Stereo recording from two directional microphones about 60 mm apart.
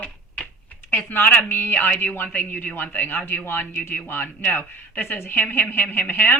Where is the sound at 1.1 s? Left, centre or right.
Left.